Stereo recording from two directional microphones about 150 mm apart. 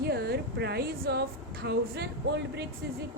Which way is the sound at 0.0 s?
90° right.